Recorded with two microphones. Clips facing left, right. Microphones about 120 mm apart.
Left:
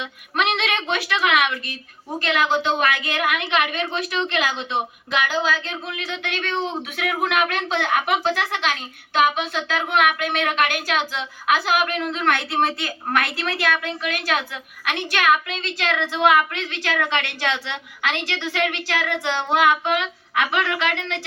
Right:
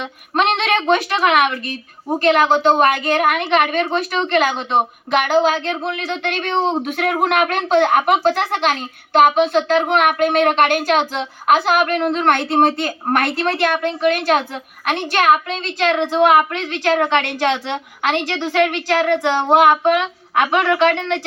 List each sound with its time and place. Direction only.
0.0 s speech: 45° right (ahead or behind)